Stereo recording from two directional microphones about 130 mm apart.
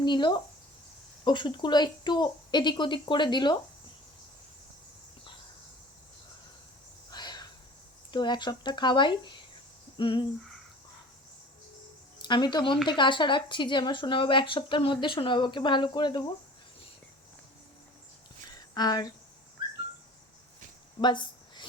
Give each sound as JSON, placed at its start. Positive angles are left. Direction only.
{"t": 0.0, "sound": "speech", "side_deg": 35}
{"t": 7.1, "sound": "a sound", "side_deg": 35}
{"t": 8.1, "sound": "speech", "side_deg": 35}
{"t": 12.2, "sound": "speech", "side_deg": 35}
{"t": 18.7, "sound": "speech", "side_deg": 30}
{"t": 21.0, "sound": "a sound", "side_deg": 35}